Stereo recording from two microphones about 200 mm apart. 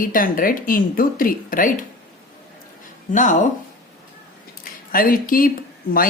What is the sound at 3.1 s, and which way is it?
Speech, 40° left (ahead or behind).